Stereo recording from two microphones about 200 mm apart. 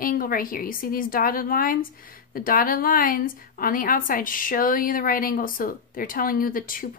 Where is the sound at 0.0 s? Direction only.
45° left (ahead or behind).